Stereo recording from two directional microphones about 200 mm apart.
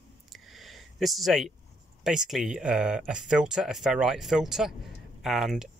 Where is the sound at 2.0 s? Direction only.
Centre (ahead or behind).